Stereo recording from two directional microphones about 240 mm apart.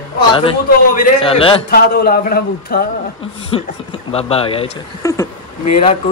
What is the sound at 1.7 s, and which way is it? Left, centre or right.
A man's voice, left.